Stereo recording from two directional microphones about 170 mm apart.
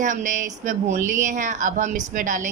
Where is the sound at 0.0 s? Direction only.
50° right (ahead or behind).